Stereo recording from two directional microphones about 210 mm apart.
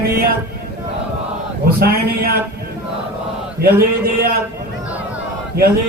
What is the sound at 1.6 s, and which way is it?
Speech, 45° right (ahead or behind).